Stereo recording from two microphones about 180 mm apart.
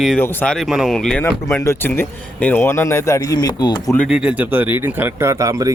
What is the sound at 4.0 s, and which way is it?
A man's voice, 5° right (ahead or behind).